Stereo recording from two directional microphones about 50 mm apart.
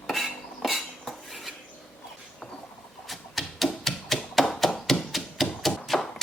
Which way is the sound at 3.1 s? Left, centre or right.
Centre.